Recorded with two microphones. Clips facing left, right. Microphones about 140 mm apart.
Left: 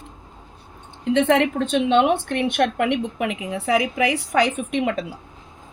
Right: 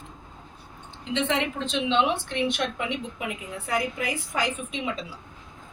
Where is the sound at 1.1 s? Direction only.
55° left (ahead or behind).